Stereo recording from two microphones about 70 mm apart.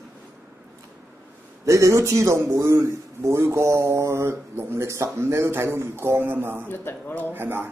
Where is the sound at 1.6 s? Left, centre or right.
Right.